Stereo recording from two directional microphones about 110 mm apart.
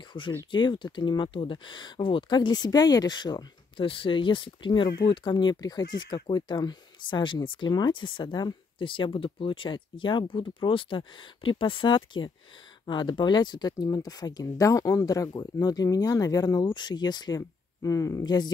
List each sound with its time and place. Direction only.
0.2 s speech: 45° left (ahead or behind)
3.8 s speech: 50° left (ahead or behind)